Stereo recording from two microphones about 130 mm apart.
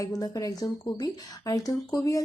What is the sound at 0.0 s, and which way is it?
A woman's voice, 25° left (ahead or behind).